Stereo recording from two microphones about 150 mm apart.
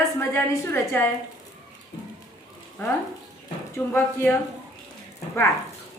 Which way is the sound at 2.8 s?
15° left (ahead or behind).